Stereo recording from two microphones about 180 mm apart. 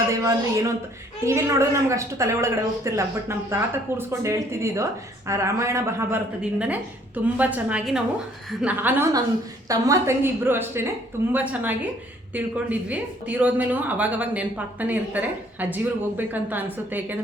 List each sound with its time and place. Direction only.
0.1 s a woman's voice: 15° right (ahead or behind)